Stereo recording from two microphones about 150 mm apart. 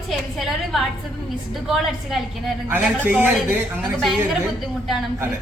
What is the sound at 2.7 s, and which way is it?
Speech, 10° right (ahead or behind).